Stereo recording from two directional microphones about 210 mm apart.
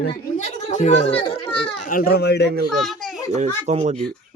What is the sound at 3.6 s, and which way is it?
Speech, 35° right (ahead or behind).